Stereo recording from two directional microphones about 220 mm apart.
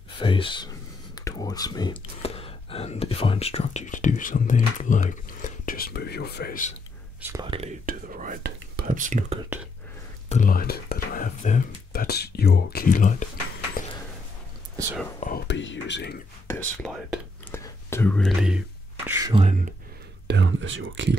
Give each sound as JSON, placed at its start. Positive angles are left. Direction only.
{"t": 0.2, "sound": "speech", "side_deg": 20}
{"t": 7.2, "sound": "speech", "side_deg": -10}
{"t": 7.4, "sound": "speech", "side_deg": -25}
{"t": 7.8, "sound": "speech", "side_deg": -40}
{"t": 10.3, "sound": "speech", "side_deg": 40}
{"t": 15.1, "sound": "speech", "side_deg": 40}
{"t": 15.4, "sound": "speech", "side_deg": 55}
{"t": 16.4, "sound": "speech", "side_deg": 10}
{"t": 19.0, "sound": "speech", "side_deg": -15}
{"t": 19.3, "sound": "speech", "side_deg": -30}
{"t": 20.2, "sound": "speech", "side_deg": -55}